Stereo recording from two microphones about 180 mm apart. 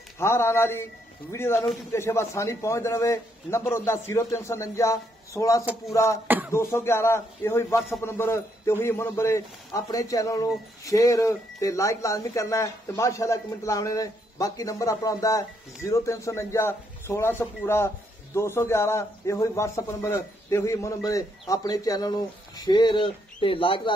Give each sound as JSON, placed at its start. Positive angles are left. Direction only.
{"t": 0.2, "sound": "a man's voice", "side_deg": 15}
{"t": 6.2, "sound": "a sound", "side_deg": -10}
{"t": 6.5, "sound": "a man's voice", "side_deg": 15}